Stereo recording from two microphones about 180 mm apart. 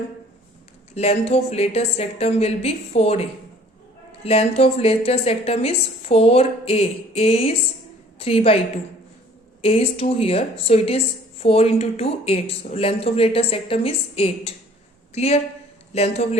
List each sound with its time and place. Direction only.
0.9 s a woman's voice: 35° left (ahead or behind)
9.6 s a woman's voice: 30° left (ahead or behind)